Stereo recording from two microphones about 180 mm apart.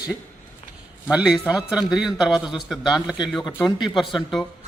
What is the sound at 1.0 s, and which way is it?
A man's voice, 5° right (ahead or behind).